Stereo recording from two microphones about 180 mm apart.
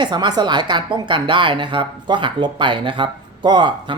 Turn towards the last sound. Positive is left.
turn(degrees=-25)  # may be behind; listen again after turning